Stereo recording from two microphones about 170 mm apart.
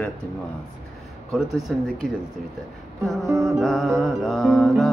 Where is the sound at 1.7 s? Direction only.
Centre (ahead or behind).